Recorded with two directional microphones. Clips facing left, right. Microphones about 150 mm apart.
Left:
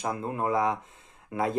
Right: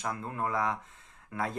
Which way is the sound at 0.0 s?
20° left (ahead or behind).